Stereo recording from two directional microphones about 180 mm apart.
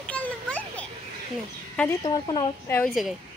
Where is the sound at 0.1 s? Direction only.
5° left (ahead or behind).